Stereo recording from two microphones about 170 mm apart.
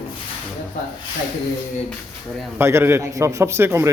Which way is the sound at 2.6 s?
15° right (ahead or behind).